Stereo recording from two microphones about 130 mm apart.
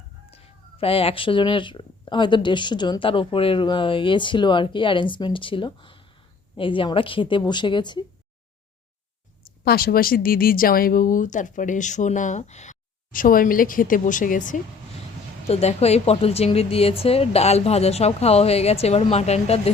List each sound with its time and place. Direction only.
0.3 s speech: 50° left (ahead or behind)
10.2 s speech: 90° left
15.4 s speech: 55° left (ahead or behind)